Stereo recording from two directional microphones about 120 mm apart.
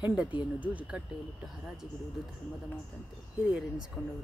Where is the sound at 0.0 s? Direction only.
10° right (ahead or behind).